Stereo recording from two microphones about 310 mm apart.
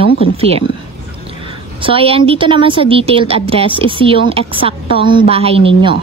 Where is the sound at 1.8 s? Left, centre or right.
Centre.